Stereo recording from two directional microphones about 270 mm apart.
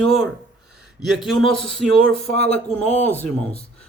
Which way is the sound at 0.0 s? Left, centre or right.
Centre.